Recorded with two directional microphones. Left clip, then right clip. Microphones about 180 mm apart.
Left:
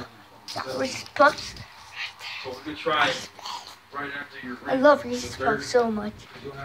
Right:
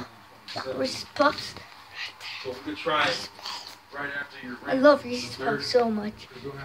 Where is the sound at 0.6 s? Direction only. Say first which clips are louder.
Left 1 dB; 5° right (ahead or behind).